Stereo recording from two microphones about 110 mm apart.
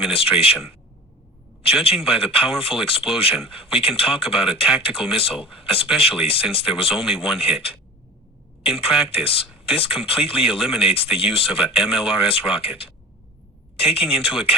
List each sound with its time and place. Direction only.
0.0 s speech: 60° left (ahead or behind)
8.7 s speech: 60° left (ahead or behind)